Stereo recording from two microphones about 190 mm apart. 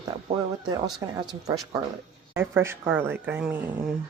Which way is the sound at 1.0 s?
20° right (ahead or behind).